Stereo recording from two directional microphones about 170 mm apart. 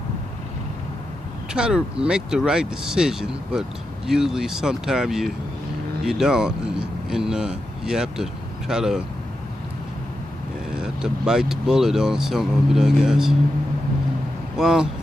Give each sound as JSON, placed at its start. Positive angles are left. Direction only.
{"t": 1.5, "sound": "speech", "side_deg": -5}
{"t": 10.8, "sound": "speech", "side_deg": -5}
{"t": 14.5, "sound": "speech", "side_deg": -5}